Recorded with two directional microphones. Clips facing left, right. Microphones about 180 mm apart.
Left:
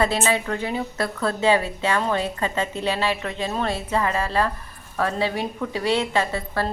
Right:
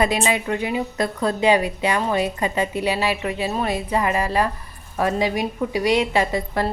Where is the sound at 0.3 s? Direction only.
15° right (ahead or behind).